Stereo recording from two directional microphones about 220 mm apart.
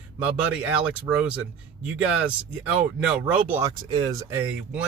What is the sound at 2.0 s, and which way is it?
Speech, 5° right (ahead or behind).